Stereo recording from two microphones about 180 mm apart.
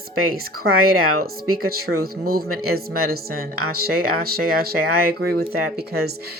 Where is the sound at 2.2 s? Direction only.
60° right (ahead or behind).